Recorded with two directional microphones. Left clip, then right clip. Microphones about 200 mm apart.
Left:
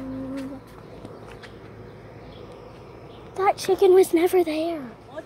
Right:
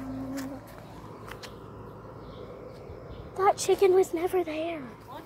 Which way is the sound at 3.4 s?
15° left (ahead or behind).